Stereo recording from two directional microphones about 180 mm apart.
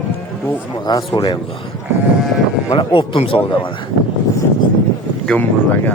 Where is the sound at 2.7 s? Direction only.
30° left (ahead or behind).